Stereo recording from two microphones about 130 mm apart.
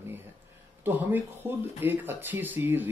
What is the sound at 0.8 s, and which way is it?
Speech, 15° right (ahead or behind).